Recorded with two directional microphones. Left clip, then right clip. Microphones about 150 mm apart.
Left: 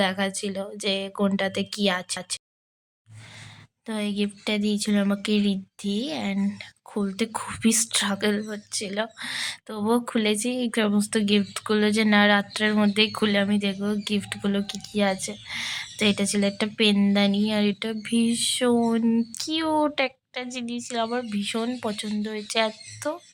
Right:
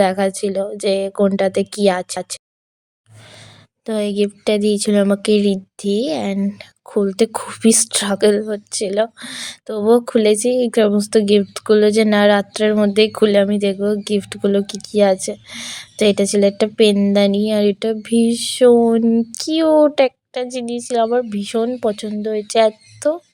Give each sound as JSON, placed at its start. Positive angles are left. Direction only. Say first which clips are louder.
{"t": 0.0, "sound": "speech", "louder": "right 9 dB", "side_deg": -30}
{"t": 3.8, "sound": "speech", "louder": "right 11 dB", "side_deg": -35}